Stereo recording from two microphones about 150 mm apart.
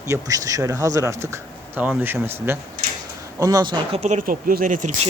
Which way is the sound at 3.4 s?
25° right (ahead or behind).